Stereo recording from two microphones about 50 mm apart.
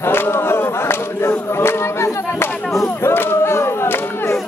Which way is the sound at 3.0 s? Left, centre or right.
Left.